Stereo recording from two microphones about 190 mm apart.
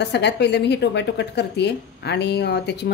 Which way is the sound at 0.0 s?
65° left (ahead or behind).